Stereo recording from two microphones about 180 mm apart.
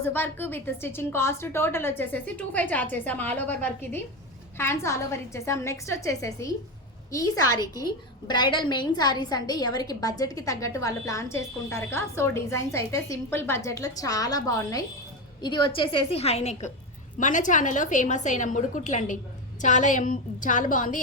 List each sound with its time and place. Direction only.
0.0 s a woman's voice: 10° left (ahead or behind); by 21.0 s 45° left (ahead or behind)